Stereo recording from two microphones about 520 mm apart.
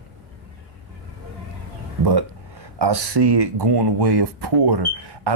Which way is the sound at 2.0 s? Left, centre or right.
Right.